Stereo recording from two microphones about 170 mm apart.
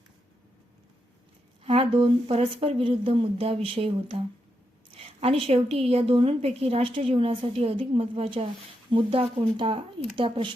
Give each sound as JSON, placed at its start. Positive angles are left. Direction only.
{"t": 1.6, "sound": "a woman's voice", "side_deg": -30}